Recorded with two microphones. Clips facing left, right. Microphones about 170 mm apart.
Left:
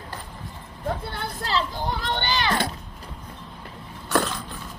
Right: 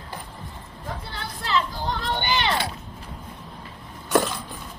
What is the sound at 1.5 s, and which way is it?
Vehicle, 40° left (ahead or behind).